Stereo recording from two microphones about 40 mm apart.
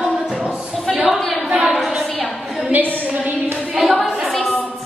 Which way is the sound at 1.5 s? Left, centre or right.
Centre.